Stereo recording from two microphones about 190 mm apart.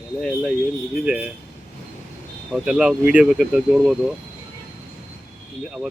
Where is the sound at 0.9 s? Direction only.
5° right (ahead or behind).